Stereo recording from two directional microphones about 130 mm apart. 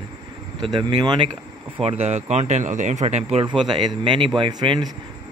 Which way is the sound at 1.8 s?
50° right (ahead or behind).